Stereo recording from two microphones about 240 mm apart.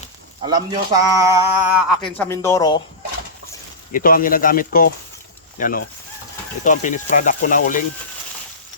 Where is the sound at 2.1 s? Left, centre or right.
Centre.